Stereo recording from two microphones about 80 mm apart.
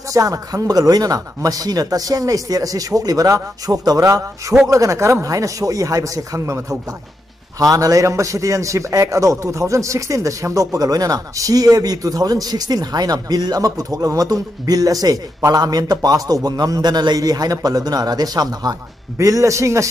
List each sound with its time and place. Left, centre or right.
0.1 s a man's voice: right